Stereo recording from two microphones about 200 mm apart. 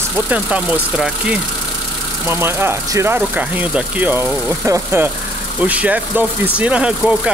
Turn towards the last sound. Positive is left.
turn(degrees=-5)  # may be behind; listen again after turning